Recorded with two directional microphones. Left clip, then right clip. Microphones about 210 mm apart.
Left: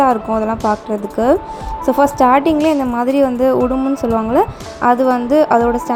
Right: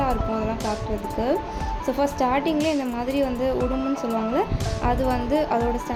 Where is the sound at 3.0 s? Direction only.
25° left (ahead or behind).